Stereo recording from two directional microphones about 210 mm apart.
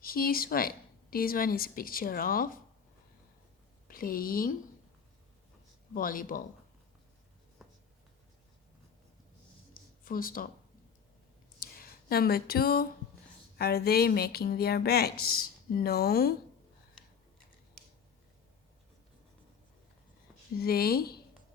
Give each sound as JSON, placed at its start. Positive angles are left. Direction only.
{"t": 0.0, "sound": "speech", "side_deg": 45}
{"t": 3.8, "sound": "speech", "side_deg": 45}
{"t": 5.9, "sound": "speech", "side_deg": 40}
{"t": 7.6, "sound": "writing", "side_deg": 0}
{"t": 10.0, "sound": "speech", "side_deg": 45}
{"t": 11.6, "sound": "speech", "side_deg": 45}
{"t": 20.6, "sound": "speech", "side_deg": 45}